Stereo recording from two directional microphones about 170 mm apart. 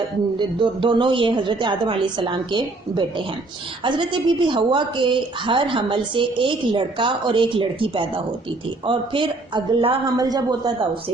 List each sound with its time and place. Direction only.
0.3 s a woman's voice: 30° right (ahead or behind)